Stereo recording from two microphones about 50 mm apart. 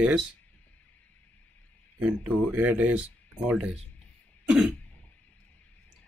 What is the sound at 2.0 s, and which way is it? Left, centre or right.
Speech, right.